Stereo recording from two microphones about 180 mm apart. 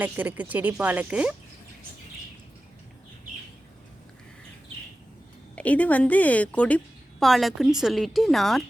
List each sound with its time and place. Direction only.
0.0 s speech: 10° right (ahead or behind)
5.5 s a woman's voice: 10° left (ahead or behind)